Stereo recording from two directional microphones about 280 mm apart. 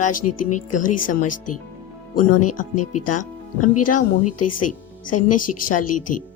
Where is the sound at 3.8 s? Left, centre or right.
Left.